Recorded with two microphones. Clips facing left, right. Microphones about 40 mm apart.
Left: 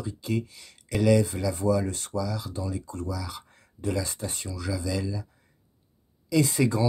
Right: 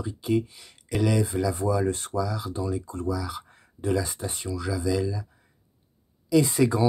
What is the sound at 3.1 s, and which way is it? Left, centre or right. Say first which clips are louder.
Speech: right 4 dB; centre.